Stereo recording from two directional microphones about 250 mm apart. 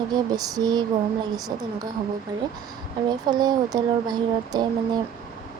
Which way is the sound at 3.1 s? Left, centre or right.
Centre.